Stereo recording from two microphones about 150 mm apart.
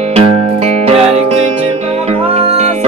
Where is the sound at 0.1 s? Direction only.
40° right (ahead or behind).